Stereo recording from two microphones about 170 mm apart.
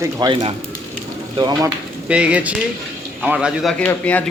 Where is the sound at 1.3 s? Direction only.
25° right (ahead or behind).